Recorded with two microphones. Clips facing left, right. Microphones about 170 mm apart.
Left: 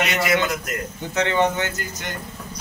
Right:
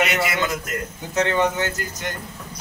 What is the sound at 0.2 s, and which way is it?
Speech, centre (ahead or behind).